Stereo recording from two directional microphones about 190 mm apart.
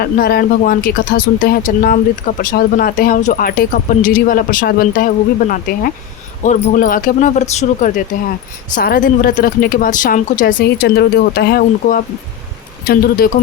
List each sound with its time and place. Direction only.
0.0 s speech: 55° left (ahead or behind)